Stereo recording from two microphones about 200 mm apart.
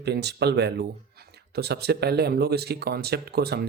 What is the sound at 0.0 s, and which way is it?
Speech, 55° right (ahead or behind).